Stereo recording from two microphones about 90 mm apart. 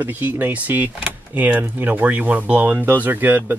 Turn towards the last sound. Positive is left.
turn(degrees=-25)  # may be behind; listen again after turning